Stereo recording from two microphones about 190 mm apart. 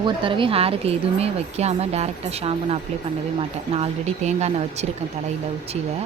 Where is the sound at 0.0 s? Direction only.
25° right (ahead or behind).